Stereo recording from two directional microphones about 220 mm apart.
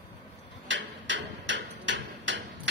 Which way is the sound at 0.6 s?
55° right (ahead or behind).